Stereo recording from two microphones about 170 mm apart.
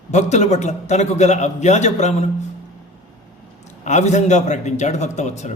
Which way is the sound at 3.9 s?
45° left (ahead or behind).